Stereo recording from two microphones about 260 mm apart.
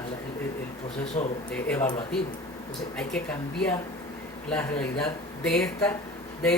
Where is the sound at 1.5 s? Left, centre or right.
Centre.